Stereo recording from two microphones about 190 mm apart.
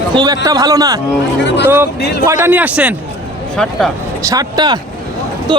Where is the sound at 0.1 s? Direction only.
20° right (ahead or behind).